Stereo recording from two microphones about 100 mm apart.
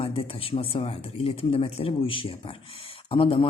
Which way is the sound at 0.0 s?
65° left (ahead or behind).